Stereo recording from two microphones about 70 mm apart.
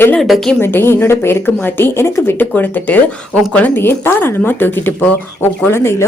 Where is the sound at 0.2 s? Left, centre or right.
Centre.